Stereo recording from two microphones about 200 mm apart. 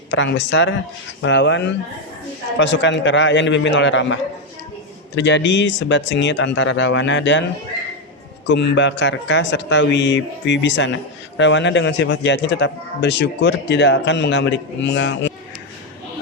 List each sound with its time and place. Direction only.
0.1 s a man's voice: 65° left (ahead or behind)
8.4 s a man's voice: 60° left (ahead or behind)